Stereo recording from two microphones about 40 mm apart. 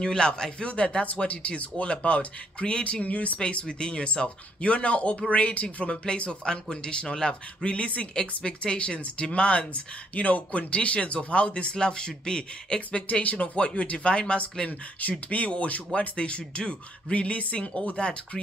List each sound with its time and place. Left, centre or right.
0.0 s speech: left
3.3 s speech: left
5.9 s speech: left
13.1 s speech: left
14.7 s speech: left